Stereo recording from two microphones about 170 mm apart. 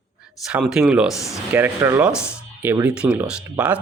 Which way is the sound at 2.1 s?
15° left (ahead or behind).